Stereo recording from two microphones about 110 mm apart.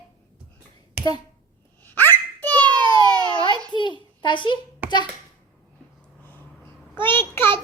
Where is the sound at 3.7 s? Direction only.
45° left (ahead or behind).